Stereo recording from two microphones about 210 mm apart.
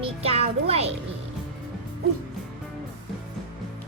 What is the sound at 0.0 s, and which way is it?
Speech, 30° right (ahead or behind).